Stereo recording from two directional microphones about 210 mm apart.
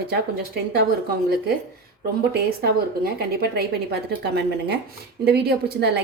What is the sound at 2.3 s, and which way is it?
A woman's voice, 50° right (ahead or behind).